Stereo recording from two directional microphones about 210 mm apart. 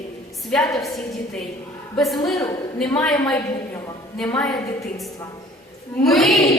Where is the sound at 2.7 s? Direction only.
5° left (ahead or behind).